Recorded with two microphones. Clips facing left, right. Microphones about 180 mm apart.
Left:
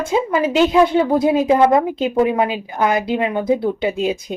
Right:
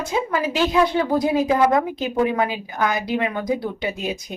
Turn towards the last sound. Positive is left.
turn(degrees=30)  # may be behind; listen again after turning